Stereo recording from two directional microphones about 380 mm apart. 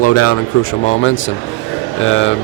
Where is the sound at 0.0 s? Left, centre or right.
Left.